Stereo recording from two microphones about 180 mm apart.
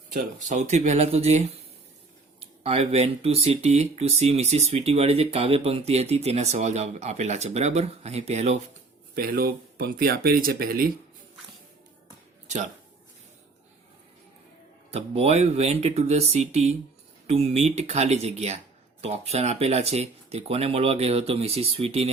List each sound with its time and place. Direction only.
0.1 s speech: 40° right (ahead or behind)
9.1 s speech: 55° right (ahead or behind)
14.8 s speech: 35° right (ahead or behind)